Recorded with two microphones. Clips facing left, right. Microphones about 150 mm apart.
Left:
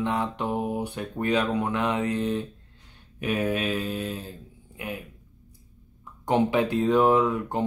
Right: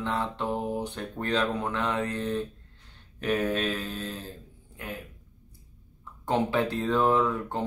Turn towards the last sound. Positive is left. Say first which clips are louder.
# left 3 dB
turn(degrees=15)  # may be behind; listen again after turning